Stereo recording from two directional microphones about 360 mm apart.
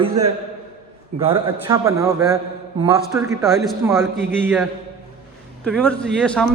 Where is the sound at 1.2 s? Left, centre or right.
Centre.